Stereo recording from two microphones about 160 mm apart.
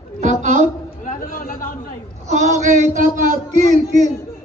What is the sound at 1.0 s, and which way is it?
Chatter, 60° left (ahead or behind).